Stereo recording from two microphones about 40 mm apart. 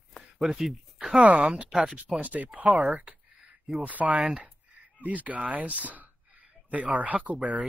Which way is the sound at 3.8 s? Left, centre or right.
Right.